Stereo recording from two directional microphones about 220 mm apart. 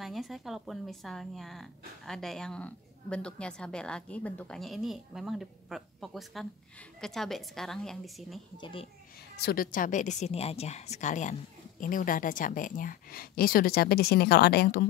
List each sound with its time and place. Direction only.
0.0 s a woman's voice: centre (ahead or behind)
8.5 s a child's voice: 20° left (ahead or behind)
9.4 s a woman's voice: 45° left (ahead or behind)